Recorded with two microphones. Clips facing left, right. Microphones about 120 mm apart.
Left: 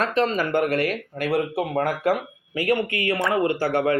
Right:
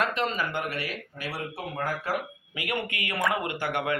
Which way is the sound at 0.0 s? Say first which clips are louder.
Left 6 dB; 35° left (ahead or behind).